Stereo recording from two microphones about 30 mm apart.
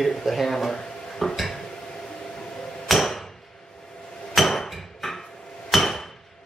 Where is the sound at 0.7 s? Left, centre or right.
Left.